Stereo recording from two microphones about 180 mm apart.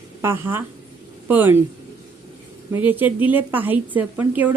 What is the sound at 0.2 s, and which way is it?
Speech, 15° right (ahead or behind).